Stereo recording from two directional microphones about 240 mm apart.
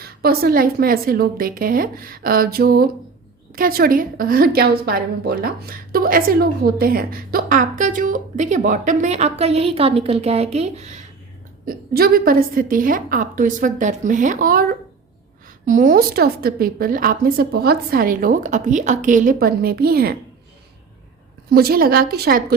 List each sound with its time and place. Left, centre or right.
0.0 s a woman's voice: right
15.6 s a woman's voice: right
21.5 s a woman's voice: right